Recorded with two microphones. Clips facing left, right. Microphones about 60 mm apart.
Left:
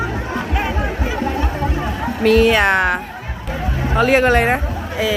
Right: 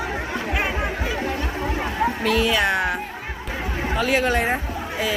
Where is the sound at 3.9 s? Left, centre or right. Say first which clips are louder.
Left 7 dB; left.